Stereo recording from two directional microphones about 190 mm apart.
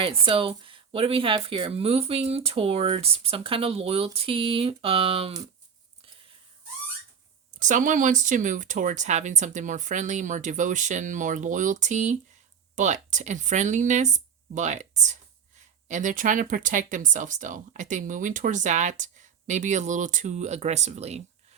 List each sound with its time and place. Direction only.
0.0 s speech: 30° right (ahead or behind)
7.6 s speech: 45° right (ahead or behind)